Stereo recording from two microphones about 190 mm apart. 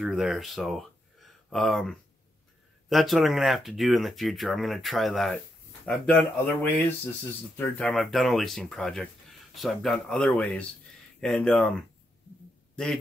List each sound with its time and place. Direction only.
0.0 s speech: centre (ahead or behind)
12.7 s a man's voice: 5° left (ahead or behind)